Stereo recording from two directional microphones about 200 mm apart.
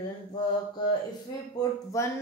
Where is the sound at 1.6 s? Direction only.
20° left (ahead or behind).